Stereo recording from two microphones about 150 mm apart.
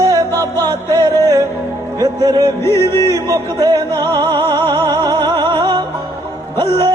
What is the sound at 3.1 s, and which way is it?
Music, 20° right (ahead or behind).